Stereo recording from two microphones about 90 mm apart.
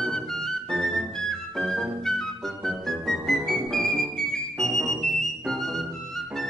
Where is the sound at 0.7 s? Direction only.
Centre (ahead or behind).